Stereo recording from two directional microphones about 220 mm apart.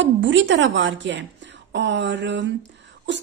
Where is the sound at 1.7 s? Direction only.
55° right (ahead or behind).